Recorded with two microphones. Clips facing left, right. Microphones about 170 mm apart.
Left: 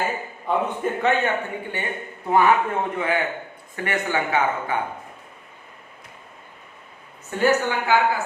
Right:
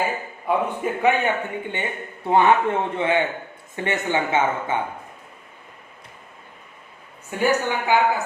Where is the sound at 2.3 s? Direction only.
25° right (ahead or behind).